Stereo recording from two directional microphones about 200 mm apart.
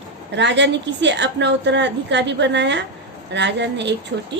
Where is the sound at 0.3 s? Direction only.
60° right (ahead or behind).